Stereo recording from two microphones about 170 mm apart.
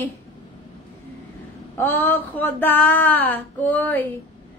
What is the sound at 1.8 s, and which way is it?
A woman's voice, 15° left (ahead or behind).